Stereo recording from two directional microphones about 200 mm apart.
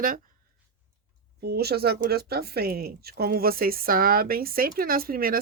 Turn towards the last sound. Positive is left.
turn(degrees=-45)  # may be behind; listen again after turning